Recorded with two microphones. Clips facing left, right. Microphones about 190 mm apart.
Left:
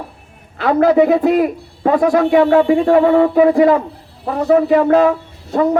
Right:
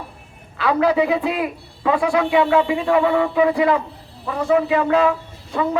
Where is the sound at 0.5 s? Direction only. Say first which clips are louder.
Left 6 dB; 45° left (ahead or behind).